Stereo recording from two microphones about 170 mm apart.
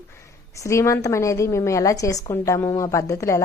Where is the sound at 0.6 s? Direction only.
15° left (ahead or behind).